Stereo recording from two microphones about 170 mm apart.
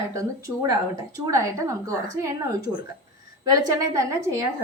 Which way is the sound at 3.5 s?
20° right (ahead or behind).